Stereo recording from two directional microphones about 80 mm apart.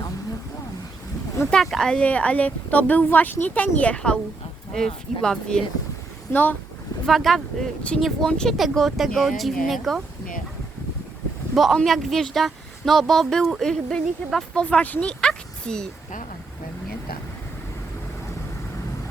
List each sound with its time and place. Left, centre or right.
1.6 s speech: centre
6.3 s speech: left
7.0 s speech: centre
11.5 s speech: centre
14.6 s speech: centre
15.2 s a sound: centre